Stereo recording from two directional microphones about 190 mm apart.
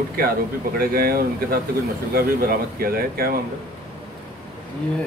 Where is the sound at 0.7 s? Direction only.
50° right (ahead or behind).